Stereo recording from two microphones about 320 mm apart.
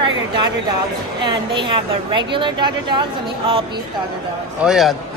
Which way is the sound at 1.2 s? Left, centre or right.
Centre.